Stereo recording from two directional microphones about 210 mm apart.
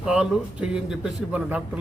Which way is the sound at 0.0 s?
5° right (ahead or behind).